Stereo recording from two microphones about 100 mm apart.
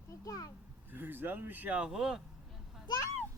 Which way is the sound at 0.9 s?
20° right (ahead or behind).